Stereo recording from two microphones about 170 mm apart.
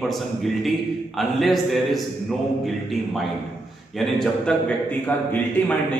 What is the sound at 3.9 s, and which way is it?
Speech, centre (ahead or behind).